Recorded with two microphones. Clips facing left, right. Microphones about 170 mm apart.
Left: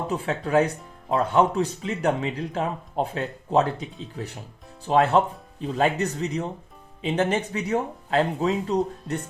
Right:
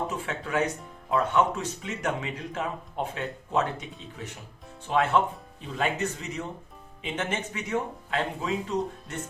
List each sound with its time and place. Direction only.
0.1 s speech: 35° left (ahead or behind)